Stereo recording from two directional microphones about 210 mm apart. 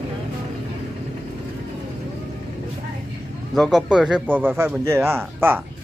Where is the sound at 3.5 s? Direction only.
Centre (ahead or behind).